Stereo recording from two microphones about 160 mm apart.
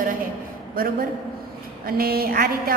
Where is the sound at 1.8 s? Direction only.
70° right (ahead or behind).